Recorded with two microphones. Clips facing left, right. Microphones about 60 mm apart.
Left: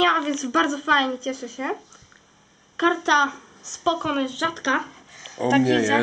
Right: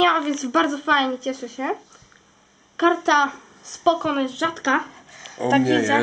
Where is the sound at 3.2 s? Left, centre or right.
Centre.